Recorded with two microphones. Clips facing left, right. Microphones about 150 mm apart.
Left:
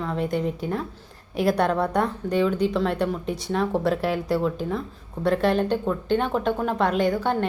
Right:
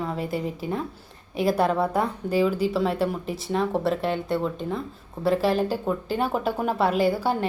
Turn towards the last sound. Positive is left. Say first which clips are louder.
# even
turn(degrees=-5)  # may be behind; listen again after turning